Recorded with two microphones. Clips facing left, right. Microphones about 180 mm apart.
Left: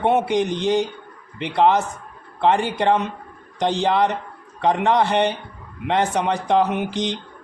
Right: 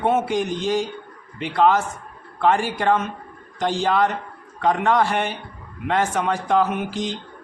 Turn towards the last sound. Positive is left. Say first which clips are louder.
# left 1 dB
turn(degrees=20)  # may be behind; listen again after turning